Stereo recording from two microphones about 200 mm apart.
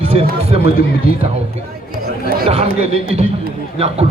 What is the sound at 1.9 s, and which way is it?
Speech, 45° right (ahead or behind).